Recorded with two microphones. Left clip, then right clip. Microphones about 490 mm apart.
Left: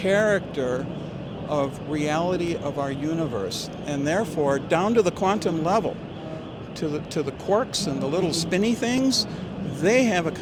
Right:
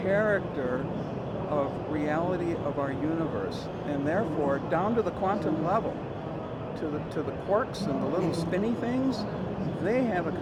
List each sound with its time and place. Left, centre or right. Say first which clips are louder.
0.1 s speech: left 5 dB; left
2.0 s speech: left 5 dB; left
7.2 s speech: left 4 dB; left